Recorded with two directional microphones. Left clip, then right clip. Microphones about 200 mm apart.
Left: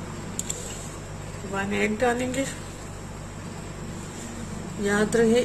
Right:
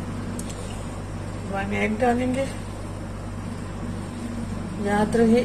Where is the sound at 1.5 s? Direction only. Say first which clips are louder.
Even; 30° left (ahead or behind).